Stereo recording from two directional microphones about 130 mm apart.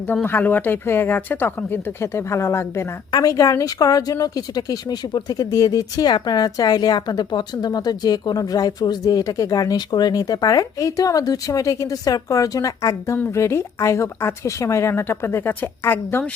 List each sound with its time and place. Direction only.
0.1 s speech: 15° left (ahead or behind)